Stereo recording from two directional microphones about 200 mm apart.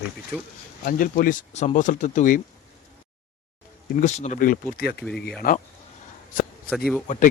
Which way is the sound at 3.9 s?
35° left (ahead or behind).